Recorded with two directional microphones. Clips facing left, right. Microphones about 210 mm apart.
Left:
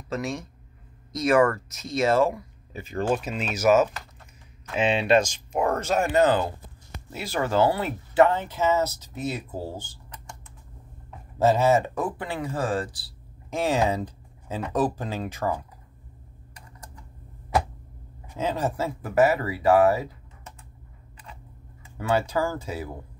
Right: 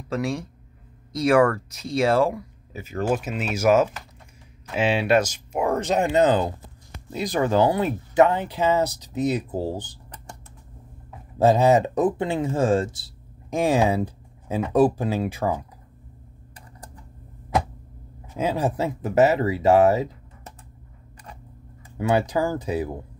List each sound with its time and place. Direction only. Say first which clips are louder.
0.1 s speech: right 4 dB; 10° right (ahead or behind)
11.1 s speech: right 3 dB; 15° right (ahead or behind)
18.3 s speech: right 3 dB; 10° right (ahead or behind)
22.1 s speech: right 2 dB; 15° right (ahead or behind)